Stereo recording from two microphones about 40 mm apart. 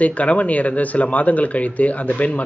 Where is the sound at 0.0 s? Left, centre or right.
Left.